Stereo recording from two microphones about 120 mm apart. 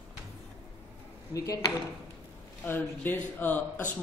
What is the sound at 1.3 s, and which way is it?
Speech, 30° left (ahead or behind).